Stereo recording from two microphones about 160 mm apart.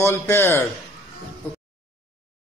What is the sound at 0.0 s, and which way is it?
Speech, 15° left (ahead or behind).